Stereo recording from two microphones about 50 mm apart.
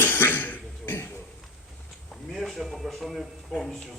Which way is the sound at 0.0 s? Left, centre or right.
Left.